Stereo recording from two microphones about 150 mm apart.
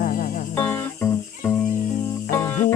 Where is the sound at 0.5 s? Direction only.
15° left (ahead or behind).